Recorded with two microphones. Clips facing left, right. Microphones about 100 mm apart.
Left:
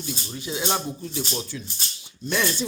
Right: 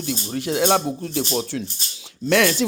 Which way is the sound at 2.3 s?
90° right.